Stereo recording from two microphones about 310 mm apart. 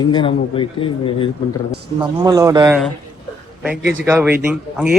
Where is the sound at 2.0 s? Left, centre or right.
Centre.